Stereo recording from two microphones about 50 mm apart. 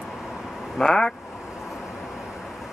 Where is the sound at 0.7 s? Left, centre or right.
Centre.